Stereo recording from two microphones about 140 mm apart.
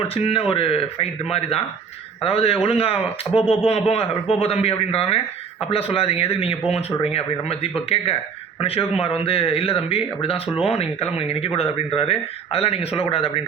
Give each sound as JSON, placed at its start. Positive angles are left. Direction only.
{"t": 0.1, "sound": "speech", "side_deg": 45}
{"t": 9.0, "sound": "speech", "side_deg": 45}